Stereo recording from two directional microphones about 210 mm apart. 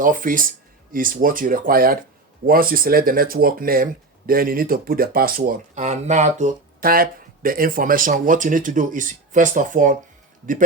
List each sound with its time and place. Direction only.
0.0 s speech: 40° right (ahead or behind)